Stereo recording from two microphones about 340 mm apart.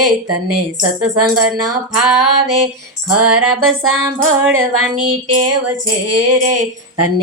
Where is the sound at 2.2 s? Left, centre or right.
Right.